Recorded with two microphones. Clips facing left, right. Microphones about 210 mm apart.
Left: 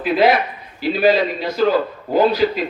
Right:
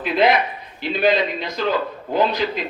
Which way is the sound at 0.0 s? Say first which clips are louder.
Left 2 dB; 5° left (ahead or behind).